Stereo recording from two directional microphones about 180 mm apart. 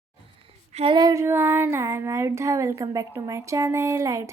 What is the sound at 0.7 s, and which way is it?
Child singing, 30° right (ahead or behind).